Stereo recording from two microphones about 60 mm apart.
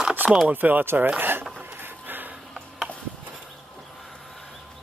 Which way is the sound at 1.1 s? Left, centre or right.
Right.